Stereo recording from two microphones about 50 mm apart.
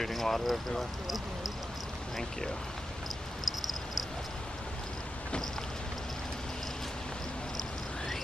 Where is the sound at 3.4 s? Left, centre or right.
Centre.